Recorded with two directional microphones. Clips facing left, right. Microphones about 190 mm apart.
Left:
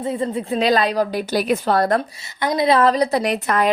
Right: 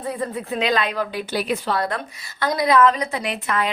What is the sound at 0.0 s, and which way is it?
Speech, 25° left (ahead or behind).